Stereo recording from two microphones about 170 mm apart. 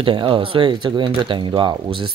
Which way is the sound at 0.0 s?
30° right (ahead or behind).